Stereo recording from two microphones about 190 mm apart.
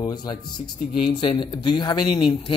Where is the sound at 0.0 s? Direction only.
20° left (ahead or behind).